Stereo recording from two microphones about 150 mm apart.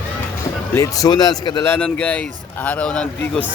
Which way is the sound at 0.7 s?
20° left (ahead or behind).